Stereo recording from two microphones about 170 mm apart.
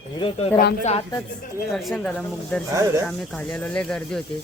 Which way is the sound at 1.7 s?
Centre (ahead or behind).